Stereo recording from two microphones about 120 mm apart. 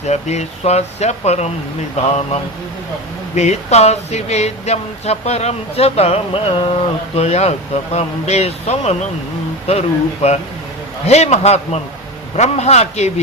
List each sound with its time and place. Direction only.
0.1 s speech: 70° left (ahead or behind)
3.3 s speech: 70° left (ahead or behind); by 6.7 s 50° left (ahead or behind)
7.2 s speech: 60° left (ahead or behind)